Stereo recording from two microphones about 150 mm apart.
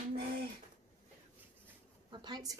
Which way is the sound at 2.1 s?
30° right (ahead or behind).